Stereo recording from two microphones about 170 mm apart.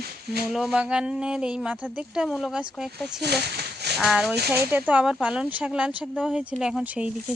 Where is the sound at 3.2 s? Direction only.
75° right (ahead or behind).